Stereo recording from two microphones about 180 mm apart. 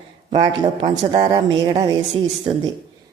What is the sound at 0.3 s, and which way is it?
Speech, 30° right (ahead or behind).